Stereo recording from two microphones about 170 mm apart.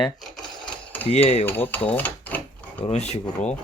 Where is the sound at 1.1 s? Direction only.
35° left (ahead or behind).